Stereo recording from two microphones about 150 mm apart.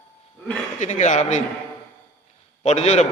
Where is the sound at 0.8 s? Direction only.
55° left (ahead or behind).